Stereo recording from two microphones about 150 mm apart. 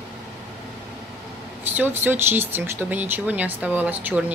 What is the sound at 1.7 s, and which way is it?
Speech, 10° right (ahead or behind).